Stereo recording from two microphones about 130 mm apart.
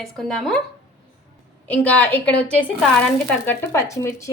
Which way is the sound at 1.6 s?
10° left (ahead or behind).